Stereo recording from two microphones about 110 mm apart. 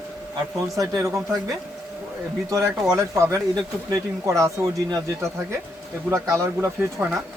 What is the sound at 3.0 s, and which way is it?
Speech, 30° right (ahead or behind).